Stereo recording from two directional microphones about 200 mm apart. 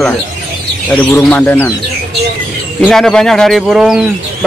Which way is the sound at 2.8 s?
5° left (ahead or behind).